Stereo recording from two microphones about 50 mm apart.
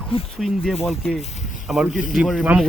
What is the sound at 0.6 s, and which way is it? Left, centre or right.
Speech, centre.